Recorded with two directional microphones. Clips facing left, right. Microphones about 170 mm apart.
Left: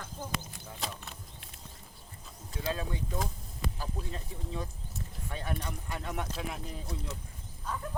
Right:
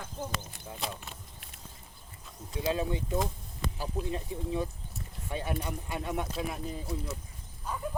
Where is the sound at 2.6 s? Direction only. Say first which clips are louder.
Right 4 dB; 15° right (ahead or behind).